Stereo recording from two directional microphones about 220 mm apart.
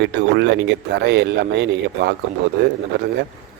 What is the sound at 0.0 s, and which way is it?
A man's voice, 55° right (ahead or behind).